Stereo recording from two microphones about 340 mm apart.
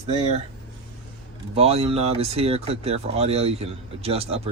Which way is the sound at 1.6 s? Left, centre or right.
Centre.